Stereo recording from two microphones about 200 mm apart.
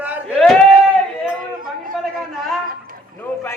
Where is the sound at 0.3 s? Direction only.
5° left (ahead or behind).